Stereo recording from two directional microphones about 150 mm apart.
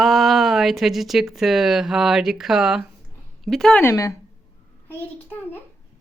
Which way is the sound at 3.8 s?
20° left (ahead or behind).